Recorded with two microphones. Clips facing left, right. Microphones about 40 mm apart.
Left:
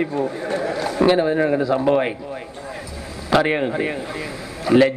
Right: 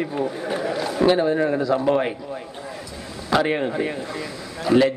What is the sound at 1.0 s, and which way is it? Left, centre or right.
A woman's voice, centre.